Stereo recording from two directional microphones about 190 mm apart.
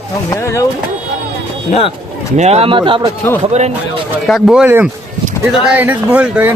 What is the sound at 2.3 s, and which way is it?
Speech, 35° right (ahead or behind).